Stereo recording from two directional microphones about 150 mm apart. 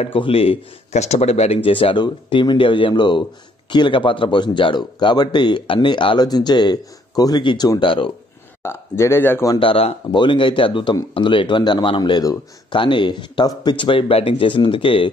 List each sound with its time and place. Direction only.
0.0 s a man's voice: 35° left (ahead or behind); by 9.6 s 15° left (ahead or behind)
9.6 s speech: 40° left (ahead or behind)